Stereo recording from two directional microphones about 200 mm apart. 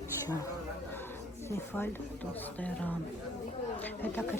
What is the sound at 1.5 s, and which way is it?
Speech, 10° left (ahead or behind).